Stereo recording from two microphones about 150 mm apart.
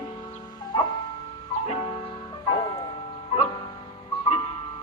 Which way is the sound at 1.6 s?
40° left (ahead or behind).